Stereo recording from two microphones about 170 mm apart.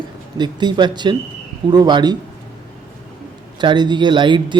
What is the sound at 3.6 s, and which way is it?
Speech, 25° right (ahead or behind).